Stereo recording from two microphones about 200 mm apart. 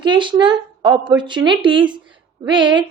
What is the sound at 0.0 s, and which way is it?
A woman's voice, 25° right (ahead or behind).